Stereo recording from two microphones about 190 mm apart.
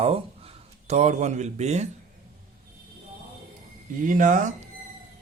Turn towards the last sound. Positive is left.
turn(degrees=-40)  # may be behind; listen again after turning